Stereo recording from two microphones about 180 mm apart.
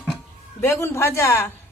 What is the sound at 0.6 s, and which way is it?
Speech, 15° left (ahead or behind).